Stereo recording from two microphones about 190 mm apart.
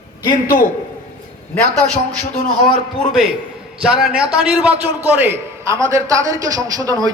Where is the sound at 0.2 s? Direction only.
25° left (ahead or behind).